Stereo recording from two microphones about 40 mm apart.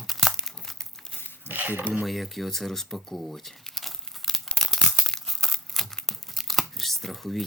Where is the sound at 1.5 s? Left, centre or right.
Right.